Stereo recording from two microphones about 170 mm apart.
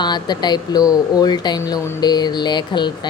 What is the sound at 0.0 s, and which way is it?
Speech, 25° left (ahead or behind).